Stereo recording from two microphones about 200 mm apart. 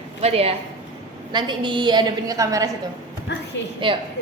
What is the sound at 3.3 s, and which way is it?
Speech, 60° left (ahead or behind).